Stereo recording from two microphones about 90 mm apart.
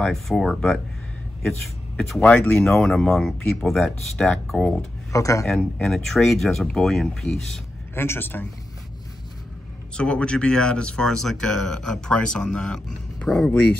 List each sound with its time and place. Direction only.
0.0 s speech: 5° left (ahead or behind)
2.0 s speech: 5° left (ahead or behind)
5.1 s a man's voice: 35° left (ahead or behind)
5.4 s speech: 5° left (ahead or behind)
7.9 s a man's voice: 25° left (ahead or behind)
9.9 s speech: 10° left (ahead or behind)